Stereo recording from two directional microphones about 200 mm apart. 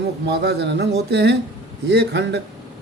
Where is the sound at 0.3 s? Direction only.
55° right (ahead or behind).